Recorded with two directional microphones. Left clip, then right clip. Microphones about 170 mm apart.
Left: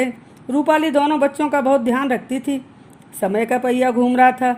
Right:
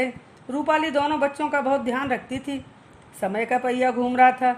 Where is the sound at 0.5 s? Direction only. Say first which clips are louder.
Left 6 dB; 45° left (ahead or behind).